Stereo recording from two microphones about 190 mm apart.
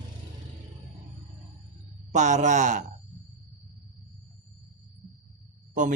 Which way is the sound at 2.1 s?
40° right (ahead or behind).